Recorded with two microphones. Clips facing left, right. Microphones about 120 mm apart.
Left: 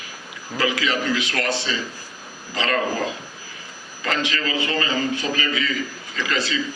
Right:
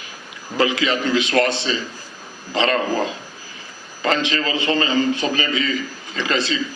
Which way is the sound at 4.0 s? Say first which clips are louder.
Right 4 dB; 25° right (ahead or behind).